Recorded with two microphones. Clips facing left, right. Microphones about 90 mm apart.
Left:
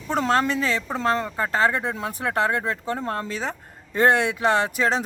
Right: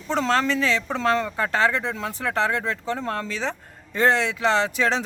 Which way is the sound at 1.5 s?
40° left (ahead or behind).